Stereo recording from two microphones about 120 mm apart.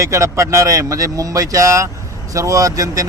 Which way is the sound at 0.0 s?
25° right (ahead or behind).